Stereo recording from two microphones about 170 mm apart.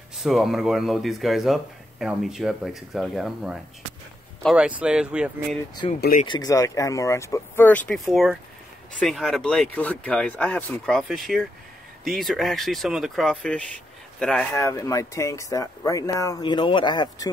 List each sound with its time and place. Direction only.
0.2 s speech: centre (ahead or behind)
5.8 s speech: 30° left (ahead or behind); by 13.7 s 5° left (ahead or behind)
14.5 s speech: 15° left (ahead or behind)